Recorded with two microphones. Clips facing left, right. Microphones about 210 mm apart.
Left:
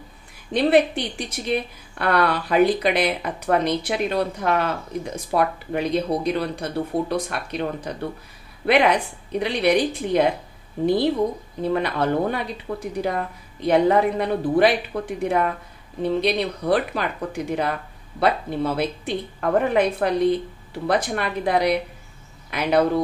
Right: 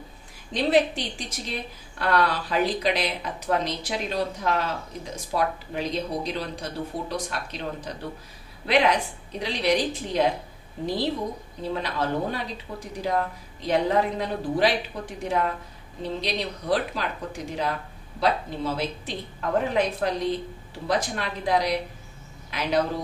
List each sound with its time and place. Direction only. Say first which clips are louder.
0.5 s a woman's voice: left 4 dB; 60° left (ahead or behind)
11.6 s a woman's voice: left 6 dB; 60° left (ahead or behind)